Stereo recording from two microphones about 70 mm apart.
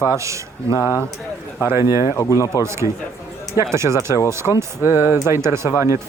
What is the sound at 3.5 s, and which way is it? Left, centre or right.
Speech, right.